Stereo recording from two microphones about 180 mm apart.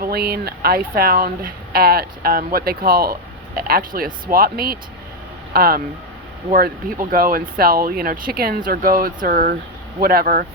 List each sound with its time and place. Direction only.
0.0 s speech: 60° right (ahead or behind)